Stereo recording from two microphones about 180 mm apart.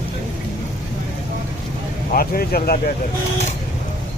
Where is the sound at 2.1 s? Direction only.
55° left (ahead or behind).